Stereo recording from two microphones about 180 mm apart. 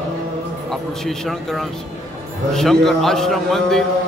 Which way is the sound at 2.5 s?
Centre (ahead or behind).